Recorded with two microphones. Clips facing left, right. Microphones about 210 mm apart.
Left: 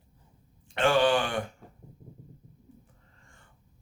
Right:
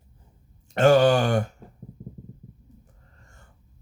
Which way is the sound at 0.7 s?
40° right (ahead or behind).